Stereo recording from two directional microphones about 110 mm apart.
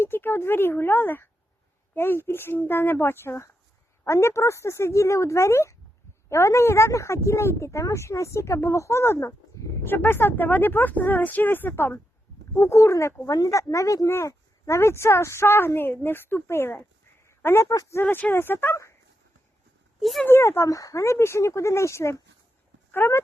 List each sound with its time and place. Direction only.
0.0 s a woman's voice: 20° left (ahead or behind)
17.2 s a sound: 25° left (ahead or behind)
17.7 s speech: 30° left (ahead or behind)
18.0 s a woman's voice: 15° left (ahead or behind)
20.0 s speech: centre (ahead or behind)
20.2 s a woman's voice: 20° left (ahead or behind)